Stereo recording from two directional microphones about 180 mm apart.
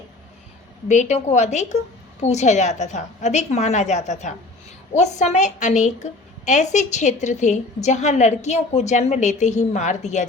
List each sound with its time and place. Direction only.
0.9 s a woman's voice: 40° left (ahead or behind)